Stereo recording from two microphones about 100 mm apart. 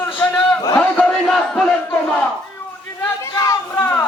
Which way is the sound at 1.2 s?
5° left (ahead or behind).